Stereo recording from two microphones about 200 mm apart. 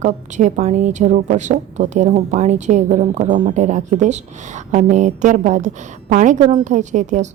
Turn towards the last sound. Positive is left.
turn(degrees=-35)  # may be behind; listen again after turning